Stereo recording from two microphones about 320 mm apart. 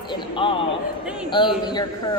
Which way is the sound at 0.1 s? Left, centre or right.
Centre.